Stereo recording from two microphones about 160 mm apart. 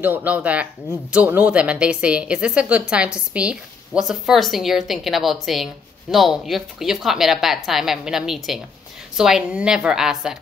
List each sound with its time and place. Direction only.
0.0 s a woman's voice: 10° right (ahead or behind)